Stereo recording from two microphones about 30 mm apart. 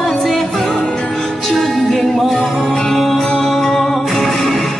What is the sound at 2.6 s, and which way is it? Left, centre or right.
Music, left.